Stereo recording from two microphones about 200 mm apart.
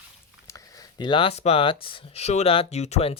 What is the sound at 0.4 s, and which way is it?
Speech, 15° left (ahead or behind).